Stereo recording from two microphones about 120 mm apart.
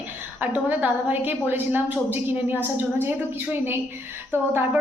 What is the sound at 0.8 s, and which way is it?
A woman's voice, 15° right (ahead or behind).